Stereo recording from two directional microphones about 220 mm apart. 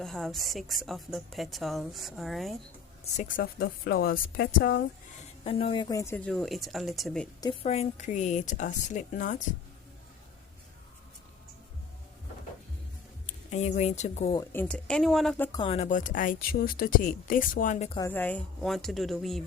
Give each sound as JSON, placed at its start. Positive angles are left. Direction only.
{"t": 0.0, "sound": "a woman's voice", "side_deg": 0}
{"t": 3.0, "sound": "speech", "side_deg": 35}
{"t": 5.4, "sound": "a woman's voice", "side_deg": 25}
{"t": 7.6, "sound": "speech", "side_deg": 30}
{"t": 13.2, "sound": "speech", "side_deg": 30}
{"t": 14.3, "sound": "a woman's voice", "side_deg": 10}
{"t": 15.5, "sound": "speech", "side_deg": 25}
{"t": 17.9, "sound": "a woman's voice", "side_deg": 10}